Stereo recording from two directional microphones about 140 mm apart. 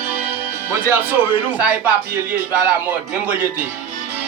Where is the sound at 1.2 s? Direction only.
10° right (ahead or behind).